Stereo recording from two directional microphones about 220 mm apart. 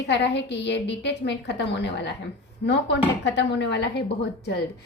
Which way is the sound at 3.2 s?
50° left (ahead or behind).